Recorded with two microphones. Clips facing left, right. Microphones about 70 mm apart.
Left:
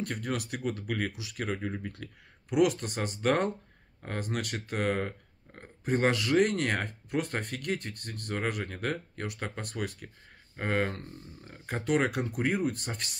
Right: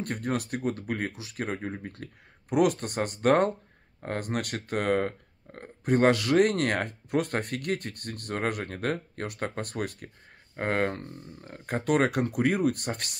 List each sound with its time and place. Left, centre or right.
0.0 s speech: right